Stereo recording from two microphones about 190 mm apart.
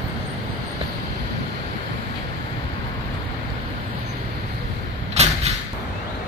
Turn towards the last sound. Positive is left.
turn(degrees=-35)  # may be behind; listen again after turning